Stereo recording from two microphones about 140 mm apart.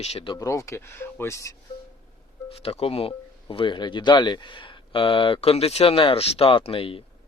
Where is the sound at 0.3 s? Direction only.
20° left (ahead or behind).